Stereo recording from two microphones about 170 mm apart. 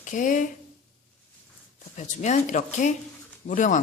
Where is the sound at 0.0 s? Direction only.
50° left (ahead or behind).